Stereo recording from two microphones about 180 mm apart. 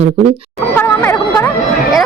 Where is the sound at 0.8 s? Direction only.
15° left (ahead or behind).